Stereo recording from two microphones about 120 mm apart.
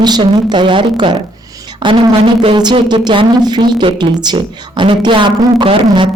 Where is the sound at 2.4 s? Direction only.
40° right (ahead or behind).